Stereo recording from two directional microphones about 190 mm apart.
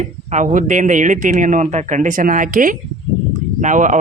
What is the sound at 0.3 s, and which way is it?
A man's voice, 40° right (ahead or behind).